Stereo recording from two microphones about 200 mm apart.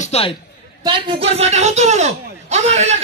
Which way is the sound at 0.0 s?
30° left (ahead or behind).